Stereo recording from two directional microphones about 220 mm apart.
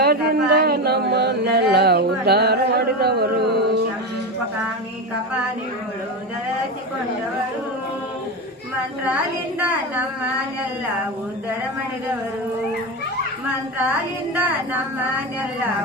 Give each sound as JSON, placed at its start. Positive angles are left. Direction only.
{"t": 0.0, "sound": "a sound", "side_deg": -45}
{"t": 9.0, "sound": "a woman's voice", "side_deg": -5}
{"t": 14.3, "sound": "a woman's voice", "side_deg": -10}